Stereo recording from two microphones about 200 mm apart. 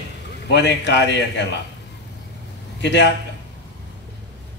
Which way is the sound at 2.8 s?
60° left (ahead or behind).